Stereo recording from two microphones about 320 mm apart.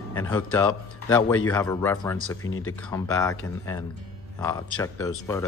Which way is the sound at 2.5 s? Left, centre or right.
Left.